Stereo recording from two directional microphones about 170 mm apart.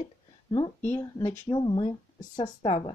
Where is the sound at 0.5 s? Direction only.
25° left (ahead or behind).